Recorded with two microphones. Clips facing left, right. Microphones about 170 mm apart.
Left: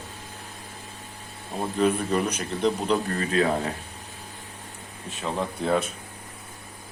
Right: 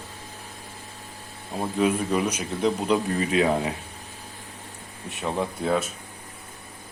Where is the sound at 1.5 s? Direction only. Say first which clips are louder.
Even; 10° right (ahead or behind).